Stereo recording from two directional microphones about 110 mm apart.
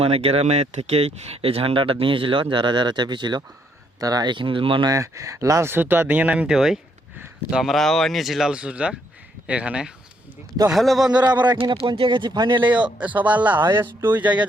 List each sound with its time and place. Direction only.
0.0 s speech: 60° right (ahead or behind)
4.9 s speech: 30° right (ahead or behind); by 11.1 s centre (ahead or behind)
11.7 s speech: 55° right (ahead or behind)
13.0 s speech: 15° right (ahead or behind)